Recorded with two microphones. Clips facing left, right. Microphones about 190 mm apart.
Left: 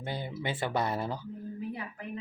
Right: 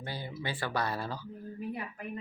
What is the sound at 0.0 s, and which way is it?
Speech, 20° left (ahead or behind).